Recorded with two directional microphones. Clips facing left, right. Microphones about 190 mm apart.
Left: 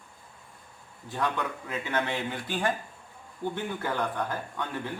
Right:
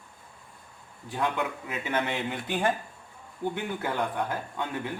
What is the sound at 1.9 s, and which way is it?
A man's voice, 20° right (ahead or behind).